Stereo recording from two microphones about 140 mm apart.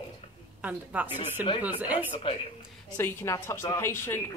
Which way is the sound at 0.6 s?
10° right (ahead or behind).